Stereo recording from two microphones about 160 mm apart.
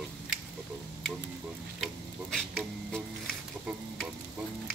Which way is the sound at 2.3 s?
Centre (ahead or behind).